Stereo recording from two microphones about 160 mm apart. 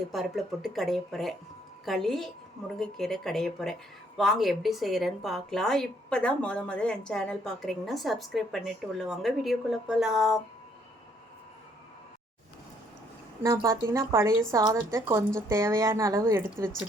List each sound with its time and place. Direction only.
0.1 s a woman's voice: centre (ahead or behind)
13.4 s speech: 20° right (ahead or behind)